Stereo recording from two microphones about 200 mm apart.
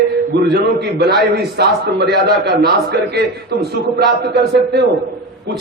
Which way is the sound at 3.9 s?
55° right (ahead or behind).